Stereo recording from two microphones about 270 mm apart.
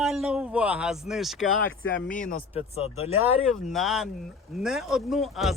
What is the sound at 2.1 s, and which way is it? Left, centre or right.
Speech, left.